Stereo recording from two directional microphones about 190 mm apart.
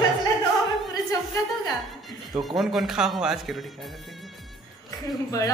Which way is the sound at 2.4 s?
Centre (ahead or behind).